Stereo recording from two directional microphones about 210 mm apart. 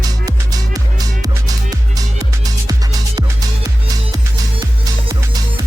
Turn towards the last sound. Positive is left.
turn(degrees=-20)  # may be behind; listen again after turning